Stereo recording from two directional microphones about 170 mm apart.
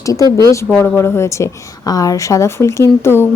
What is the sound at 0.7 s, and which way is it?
A woman's voice, 10° left (ahead or behind).